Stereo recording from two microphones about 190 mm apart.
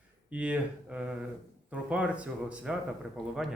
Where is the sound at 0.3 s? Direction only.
5° right (ahead or behind).